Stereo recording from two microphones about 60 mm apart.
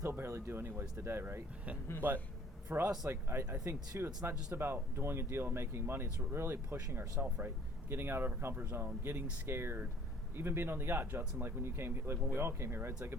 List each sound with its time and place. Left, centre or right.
0.0 s speech: right
2.6 s speech: right
11.6 s speech: right